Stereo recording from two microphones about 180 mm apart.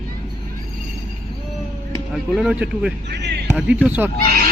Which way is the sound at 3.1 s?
70° right (ahead or behind).